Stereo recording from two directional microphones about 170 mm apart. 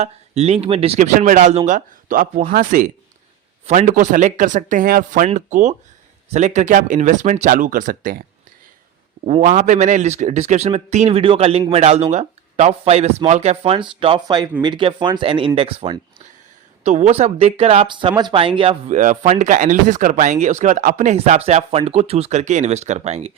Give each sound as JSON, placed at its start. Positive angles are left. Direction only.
{"t": 0.0, "sound": "a man's voice", "side_deg": -40}
{"t": 9.2, "sound": "a man's voice", "side_deg": -45}
{"t": 16.8, "sound": "a man's voice", "side_deg": -45}
{"t": 18.9, "sound": "speech", "side_deg": -50}